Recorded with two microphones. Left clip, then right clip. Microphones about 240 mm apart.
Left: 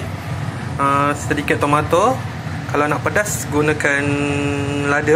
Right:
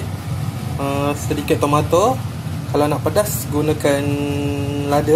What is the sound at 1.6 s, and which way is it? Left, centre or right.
Mantra, centre.